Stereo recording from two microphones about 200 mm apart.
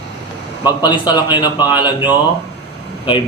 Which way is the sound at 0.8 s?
20° left (ahead or behind).